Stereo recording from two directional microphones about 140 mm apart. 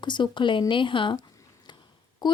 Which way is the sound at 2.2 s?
30° left (ahead or behind).